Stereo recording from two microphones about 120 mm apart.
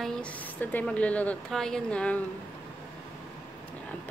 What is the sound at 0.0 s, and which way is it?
A woman's voice, 10° left (ahead or behind).